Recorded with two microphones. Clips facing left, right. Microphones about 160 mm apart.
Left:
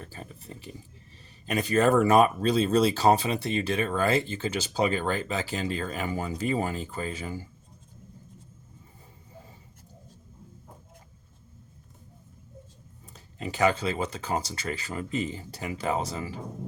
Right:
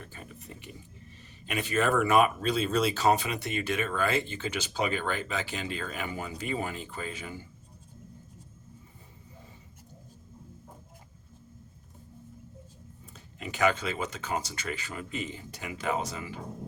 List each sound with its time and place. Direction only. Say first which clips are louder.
0.0 s pig: left 3 dB; 35° left (ahead or behind)
1.5 s speech: left 5 dB; 40° left (ahead or behind)
13.1 s speech: left 3 dB; 35° left (ahead or behind)